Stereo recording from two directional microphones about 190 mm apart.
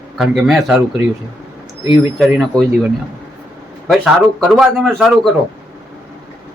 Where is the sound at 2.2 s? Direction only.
Centre (ahead or behind).